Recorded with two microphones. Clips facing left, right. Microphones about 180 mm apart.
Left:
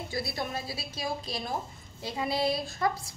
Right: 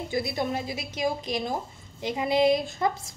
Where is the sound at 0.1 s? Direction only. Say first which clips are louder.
Right 6 dB; 20° right (ahead or behind).